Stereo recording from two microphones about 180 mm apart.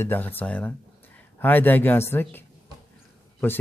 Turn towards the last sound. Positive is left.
turn(degrees=10)  # may be behind; listen again after turning